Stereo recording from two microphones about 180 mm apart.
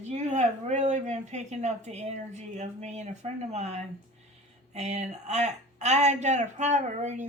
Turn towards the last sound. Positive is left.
turn(degrees=-40)  # may be behind; listen again after turning